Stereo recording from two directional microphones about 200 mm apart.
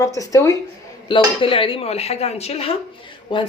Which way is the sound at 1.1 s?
25° left (ahead or behind).